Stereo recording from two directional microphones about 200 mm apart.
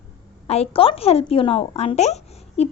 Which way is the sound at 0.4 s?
30° left (ahead or behind).